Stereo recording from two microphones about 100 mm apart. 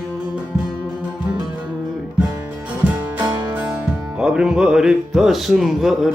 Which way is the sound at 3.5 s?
15° right (ahead or behind).